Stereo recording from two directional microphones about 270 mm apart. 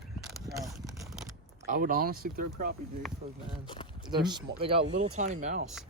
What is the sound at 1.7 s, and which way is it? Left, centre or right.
Speech, right.